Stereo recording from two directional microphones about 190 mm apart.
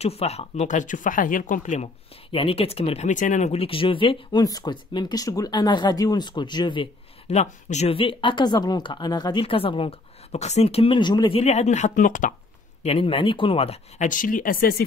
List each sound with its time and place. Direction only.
0.0 s speech: 35° left (ahead or behind)
2.3 s speech: 30° left (ahead or behind)
12.8 s speech: 30° left (ahead or behind); by 14.8 s 50° left (ahead or behind)